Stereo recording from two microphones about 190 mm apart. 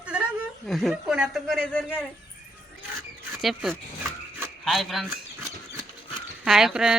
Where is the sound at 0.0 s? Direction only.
5° right (ahead or behind).